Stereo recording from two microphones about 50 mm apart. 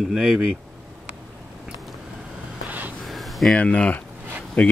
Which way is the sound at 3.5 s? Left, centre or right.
Left.